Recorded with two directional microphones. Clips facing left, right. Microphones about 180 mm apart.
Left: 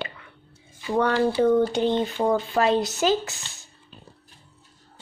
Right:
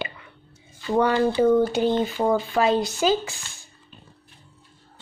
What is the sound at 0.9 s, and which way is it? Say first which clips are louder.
A woman's voice: right 1 dB; 10° right (ahead or behind).